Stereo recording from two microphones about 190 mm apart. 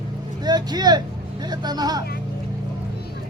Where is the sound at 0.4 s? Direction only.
20° right (ahead or behind).